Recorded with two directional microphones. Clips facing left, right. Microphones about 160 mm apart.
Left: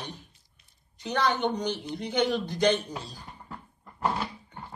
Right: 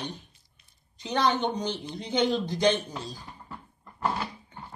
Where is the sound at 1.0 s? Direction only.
20° right (ahead or behind).